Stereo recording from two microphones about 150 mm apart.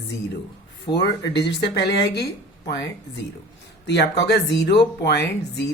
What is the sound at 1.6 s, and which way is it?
Speech, 90° left.